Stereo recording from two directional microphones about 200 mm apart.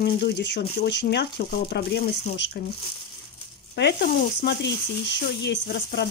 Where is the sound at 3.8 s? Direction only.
55° left (ahead or behind).